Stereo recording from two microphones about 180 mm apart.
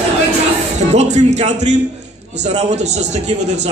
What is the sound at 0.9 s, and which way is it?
A man's voice, 40° right (ahead or behind).